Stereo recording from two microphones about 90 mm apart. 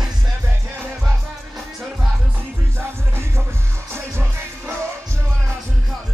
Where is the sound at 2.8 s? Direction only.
25° right (ahead or behind).